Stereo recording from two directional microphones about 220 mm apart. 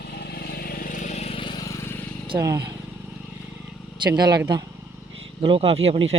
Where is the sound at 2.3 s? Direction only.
15° right (ahead or behind).